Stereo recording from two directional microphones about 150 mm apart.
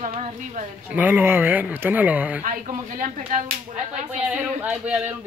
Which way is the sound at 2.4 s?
60° right (ahead or behind).